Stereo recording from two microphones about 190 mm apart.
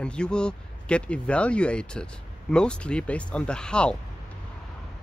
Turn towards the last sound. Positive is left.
turn(degrees=5)  # may be behind; listen again after turning